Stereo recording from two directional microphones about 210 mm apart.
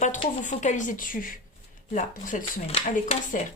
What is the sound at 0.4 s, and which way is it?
Speech, 35° left (ahead or behind).